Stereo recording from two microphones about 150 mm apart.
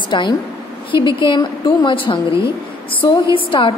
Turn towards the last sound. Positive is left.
turn(degrees=35)  # may be behind; listen again after turning